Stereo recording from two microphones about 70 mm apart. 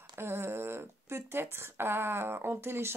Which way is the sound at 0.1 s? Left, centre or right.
Right.